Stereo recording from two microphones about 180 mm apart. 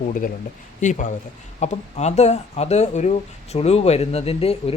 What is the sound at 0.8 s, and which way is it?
Speech, 45° left (ahead or behind).